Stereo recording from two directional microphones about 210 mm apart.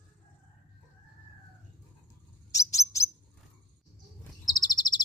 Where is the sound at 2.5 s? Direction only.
15° left (ahead or behind).